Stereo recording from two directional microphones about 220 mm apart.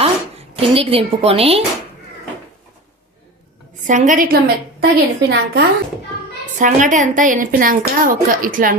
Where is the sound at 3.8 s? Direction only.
35° right (ahead or behind).